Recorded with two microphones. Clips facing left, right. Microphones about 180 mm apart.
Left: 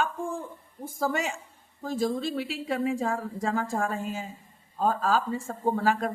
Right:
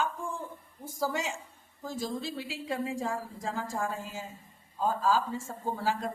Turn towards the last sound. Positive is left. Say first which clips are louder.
# left 6 dB
turn(degrees=65)  # may be behind; listen again after turning